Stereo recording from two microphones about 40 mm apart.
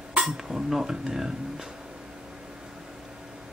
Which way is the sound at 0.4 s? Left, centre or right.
Centre.